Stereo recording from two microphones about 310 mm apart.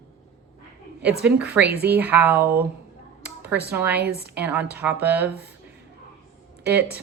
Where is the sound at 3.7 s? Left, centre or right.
Centre.